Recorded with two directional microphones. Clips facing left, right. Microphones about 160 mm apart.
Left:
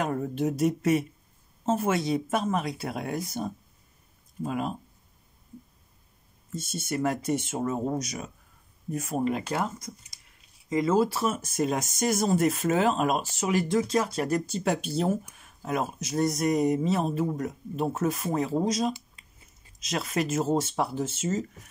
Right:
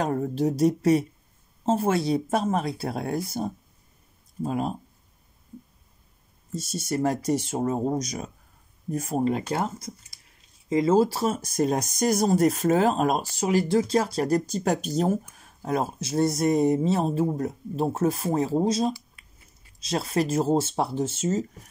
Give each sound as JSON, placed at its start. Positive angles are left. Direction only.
{"t": 0.0, "sound": "speech", "side_deg": -35}
{"t": 6.5, "sound": "speech", "side_deg": -35}